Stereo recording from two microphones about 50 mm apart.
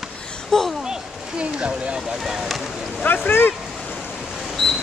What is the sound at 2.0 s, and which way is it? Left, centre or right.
Speech, centre.